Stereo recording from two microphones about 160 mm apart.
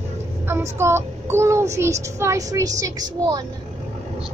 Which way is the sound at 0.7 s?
15° right (ahead or behind).